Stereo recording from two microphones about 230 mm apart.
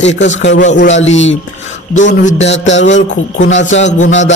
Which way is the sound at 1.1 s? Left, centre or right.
Left.